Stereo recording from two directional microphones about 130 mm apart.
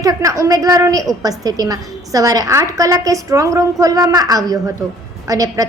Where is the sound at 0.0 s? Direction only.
25° right (ahead or behind).